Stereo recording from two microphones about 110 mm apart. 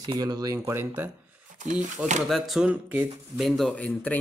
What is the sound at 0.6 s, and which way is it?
Speech, 20° right (ahead or behind).